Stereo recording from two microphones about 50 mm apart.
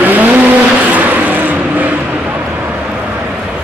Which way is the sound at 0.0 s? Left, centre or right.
Right.